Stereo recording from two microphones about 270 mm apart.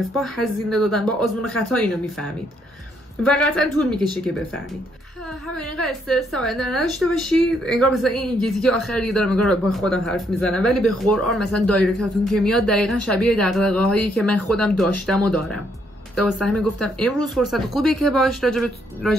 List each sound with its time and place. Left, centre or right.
0.1 s a woman's voice: centre
3.3 s a woman's voice: centre
3.7 s speech: centre
5.5 s a woman's voice: centre